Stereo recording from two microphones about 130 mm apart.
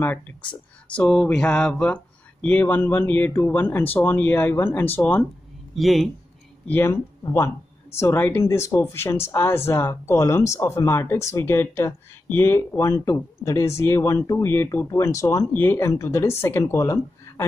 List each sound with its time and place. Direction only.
0.9 s speech: 10° left (ahead or behind)
5.8 s speech: centre (ahead or behind)
6.7 s speech: 20° left (ahead or behind)